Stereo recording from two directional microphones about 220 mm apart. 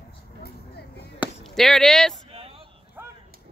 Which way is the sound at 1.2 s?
Centre (ahead or behind).